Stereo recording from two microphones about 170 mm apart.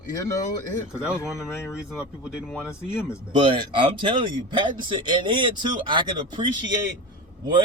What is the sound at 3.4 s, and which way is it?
Speech, 30° right (ahead or behind).